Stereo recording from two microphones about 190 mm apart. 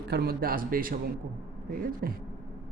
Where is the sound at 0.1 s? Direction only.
55° right (ahead or behind).